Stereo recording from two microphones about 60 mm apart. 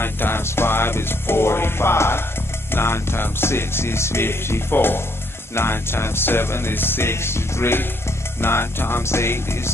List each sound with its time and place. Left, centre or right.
0.0 s music: left